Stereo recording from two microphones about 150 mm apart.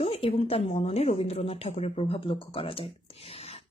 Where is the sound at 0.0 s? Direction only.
40° left (ahead or behind).